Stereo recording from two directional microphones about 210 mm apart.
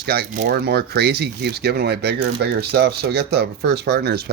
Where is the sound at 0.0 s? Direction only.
45° right (ahead or behind).